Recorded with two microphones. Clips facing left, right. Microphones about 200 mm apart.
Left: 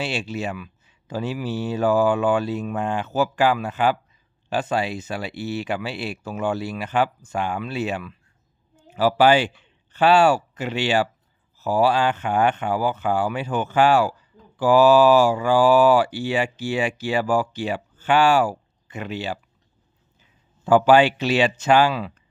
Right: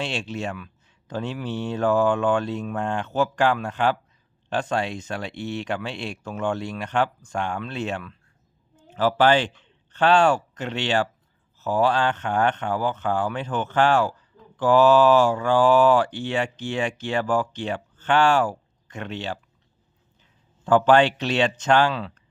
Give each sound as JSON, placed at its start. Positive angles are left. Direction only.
{"t": 0.0, "sound": "speech", "side_deg": 5}
{"t": 20.7, "sound": "speech", "side_deg": 10}